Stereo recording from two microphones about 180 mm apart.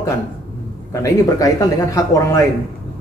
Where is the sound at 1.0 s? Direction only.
20° left (ahead or behind).